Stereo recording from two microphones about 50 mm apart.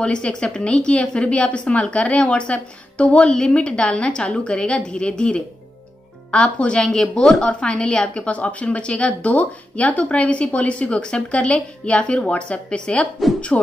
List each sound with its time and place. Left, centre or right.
0.0 s a woman's voice: centre